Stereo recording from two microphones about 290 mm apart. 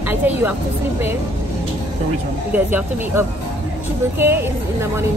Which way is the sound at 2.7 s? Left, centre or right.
Centre.